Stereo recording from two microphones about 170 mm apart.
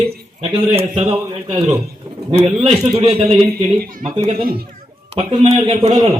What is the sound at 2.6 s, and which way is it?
Speech, 35° right (ahead or behind).